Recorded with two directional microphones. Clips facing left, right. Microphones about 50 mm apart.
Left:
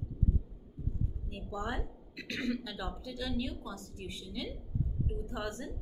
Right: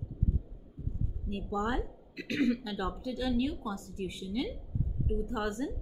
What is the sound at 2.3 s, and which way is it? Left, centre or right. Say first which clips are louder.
A woman's voice: right 6 dB; right.